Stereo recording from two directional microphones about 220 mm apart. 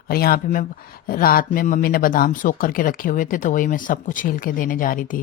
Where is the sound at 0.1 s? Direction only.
40° left (ahead or behind).